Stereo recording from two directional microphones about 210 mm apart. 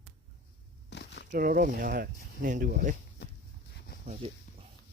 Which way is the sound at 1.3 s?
40° right (ahead or behind).